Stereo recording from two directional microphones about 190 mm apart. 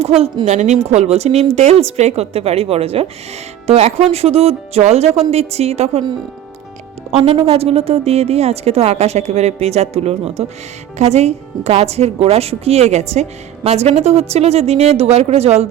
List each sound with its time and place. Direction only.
0.0 s speech: 30° right (ahead or behind)
7.3 s speech: 30° right (ahead or behind)